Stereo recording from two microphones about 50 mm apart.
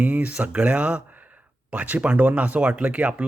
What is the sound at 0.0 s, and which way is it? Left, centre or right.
Speech, right.